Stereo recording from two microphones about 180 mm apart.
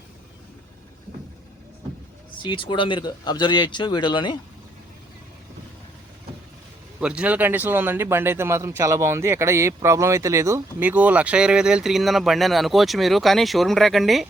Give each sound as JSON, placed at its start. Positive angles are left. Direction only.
{"t": 2.4, "sound": "speech", "side_deg": 25}
{"t": 7.0, "sound": "speech", "side_deg": -5}